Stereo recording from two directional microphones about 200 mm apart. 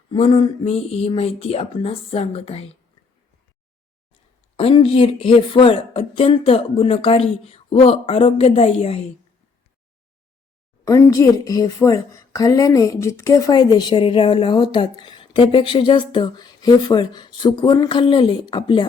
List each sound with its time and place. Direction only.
0.1 s a woman's voice: 30° left (ahead or behind)
4.5 s a woman's voice: 30° left (ahead or behind)
10.8 s a woman's voice: 15° left (ahead or behind)